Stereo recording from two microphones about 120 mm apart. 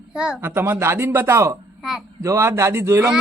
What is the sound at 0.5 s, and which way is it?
A child's voice, 20° right (ahead or behind).